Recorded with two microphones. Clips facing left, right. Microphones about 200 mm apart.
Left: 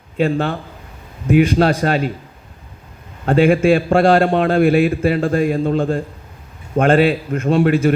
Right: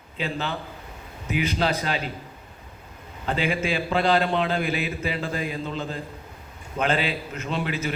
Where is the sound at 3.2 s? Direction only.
50° left (ahead or behind).